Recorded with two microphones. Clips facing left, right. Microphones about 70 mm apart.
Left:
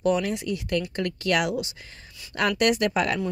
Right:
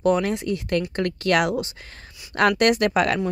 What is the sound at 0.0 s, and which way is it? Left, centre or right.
Speech, right.